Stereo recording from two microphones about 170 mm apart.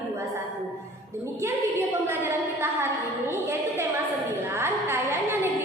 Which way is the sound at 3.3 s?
15° right (ahead or behind).